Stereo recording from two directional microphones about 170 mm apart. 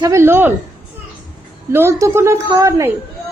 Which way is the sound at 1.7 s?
15° right (ahead or behind).